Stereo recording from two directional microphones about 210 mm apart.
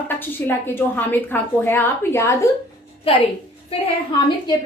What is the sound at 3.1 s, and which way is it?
Speech, 25° left (ahead or behind).